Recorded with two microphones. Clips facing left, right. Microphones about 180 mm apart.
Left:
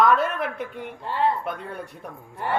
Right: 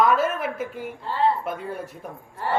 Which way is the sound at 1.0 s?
15° left (ahead or behind).